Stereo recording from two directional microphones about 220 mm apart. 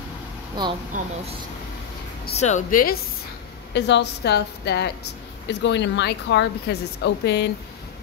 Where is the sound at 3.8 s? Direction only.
50° left (ahead or behind).